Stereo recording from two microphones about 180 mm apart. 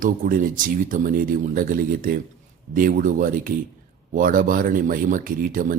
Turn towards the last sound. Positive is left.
turn(degrees=-50)  # may be behind; listen again after turning